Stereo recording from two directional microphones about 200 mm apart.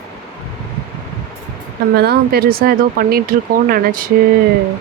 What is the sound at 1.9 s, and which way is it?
Speech, 50° right (ahead or behind).